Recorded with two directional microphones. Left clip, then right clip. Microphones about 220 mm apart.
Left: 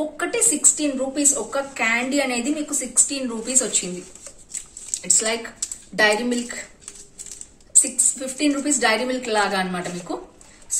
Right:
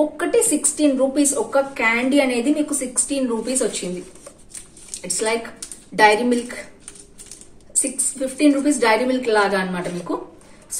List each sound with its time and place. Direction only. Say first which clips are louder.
0.2 s a woman's voice: right 3 dB; centre (ahead or behind)
5.0 s a woman's voice: right 1 dB; centre (ahead or behind)
7.8 s a woman's voice: even; 5° left (ahead or behind)